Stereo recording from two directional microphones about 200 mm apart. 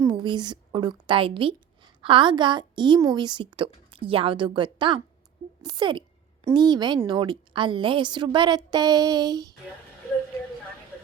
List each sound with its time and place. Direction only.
0.0 s a woman's voice: 20° right (ahead or behind)